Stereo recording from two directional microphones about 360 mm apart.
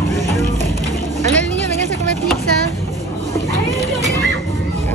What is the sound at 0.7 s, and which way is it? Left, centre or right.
Mechanisms, centre.